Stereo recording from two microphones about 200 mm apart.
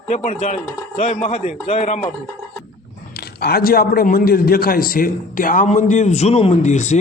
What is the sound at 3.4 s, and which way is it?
A man's voice, 50° left (ahead or behind).